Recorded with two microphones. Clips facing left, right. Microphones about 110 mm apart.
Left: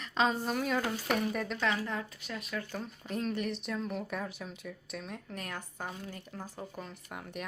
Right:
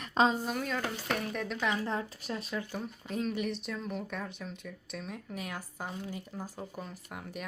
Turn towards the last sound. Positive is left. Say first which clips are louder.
# even
turn(degrees=0)  # may be behind; listen again after turning